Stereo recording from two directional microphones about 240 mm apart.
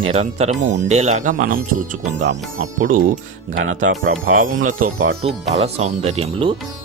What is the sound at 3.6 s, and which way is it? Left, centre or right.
Speech, right.